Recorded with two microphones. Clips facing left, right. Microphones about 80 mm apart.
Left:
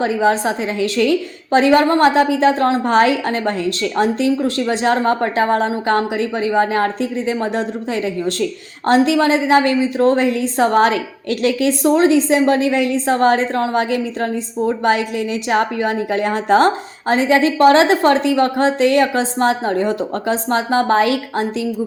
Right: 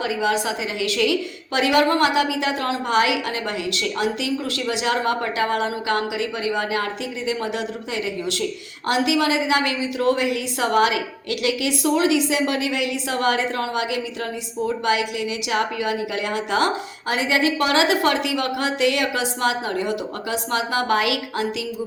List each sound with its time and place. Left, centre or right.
0.0 s a woman's voice: left